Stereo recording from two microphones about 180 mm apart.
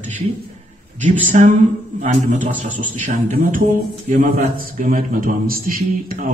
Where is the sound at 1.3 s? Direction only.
45° right (ahead or behind).